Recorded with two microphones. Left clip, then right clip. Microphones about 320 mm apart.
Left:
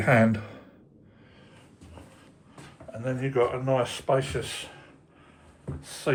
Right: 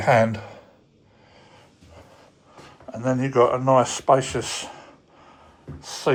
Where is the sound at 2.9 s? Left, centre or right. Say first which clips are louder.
Right 7 dB; right.